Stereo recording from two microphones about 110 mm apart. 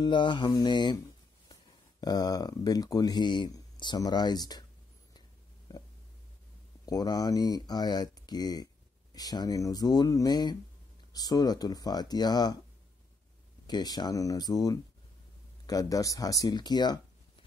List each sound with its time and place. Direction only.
0.0 s mantra: 45° left (ahead or behind)
0.5 s speech: 40° left (ahead or behind)
6.9 s speech: 35° left (ahead or behind)
13.7 s speech: 40° left (ahead or behind)